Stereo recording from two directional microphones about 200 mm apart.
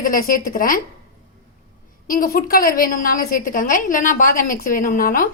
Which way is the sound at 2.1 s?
45° left (ahead or behind).